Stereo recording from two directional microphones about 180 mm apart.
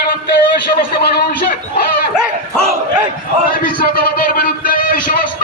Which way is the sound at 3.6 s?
55° left (ahead or behind).